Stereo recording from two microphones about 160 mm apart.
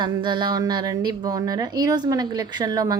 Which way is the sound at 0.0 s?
30° right (ahead or behind).